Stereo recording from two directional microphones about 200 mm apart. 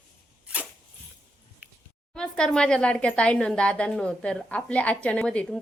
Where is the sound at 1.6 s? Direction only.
5° right (ahead or behind).